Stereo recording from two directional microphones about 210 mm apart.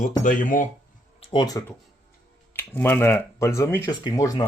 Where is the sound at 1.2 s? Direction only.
25° left (ahead or behind).